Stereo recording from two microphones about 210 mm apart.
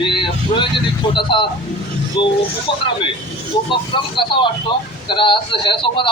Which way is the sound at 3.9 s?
25° left (ahead or behind).